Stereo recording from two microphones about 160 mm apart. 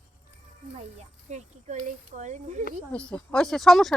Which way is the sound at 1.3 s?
50° right (ahead or behind).